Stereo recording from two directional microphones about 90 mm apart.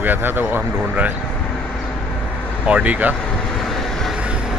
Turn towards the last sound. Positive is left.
turn(degrees=-20)  # may be behind; listen again after turning